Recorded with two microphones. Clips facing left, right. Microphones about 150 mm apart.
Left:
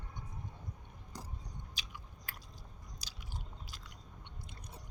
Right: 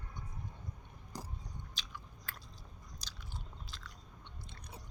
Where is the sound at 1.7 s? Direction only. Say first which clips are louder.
Right 1 dB; 10° left (ahead or behind).